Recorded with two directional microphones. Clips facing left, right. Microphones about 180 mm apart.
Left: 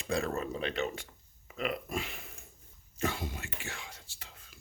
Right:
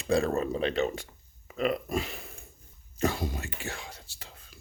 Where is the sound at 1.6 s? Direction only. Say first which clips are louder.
Right 6 dB; 40° right (ahead or behind).